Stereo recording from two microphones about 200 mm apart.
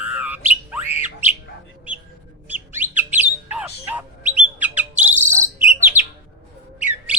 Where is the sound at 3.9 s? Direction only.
10° right (ahead or behind).